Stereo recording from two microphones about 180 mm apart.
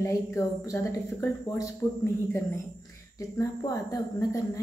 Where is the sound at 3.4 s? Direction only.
20° left (ahead or behind).